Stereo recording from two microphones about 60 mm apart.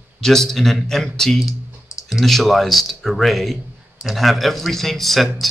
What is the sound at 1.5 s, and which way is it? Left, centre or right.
Clicking, left.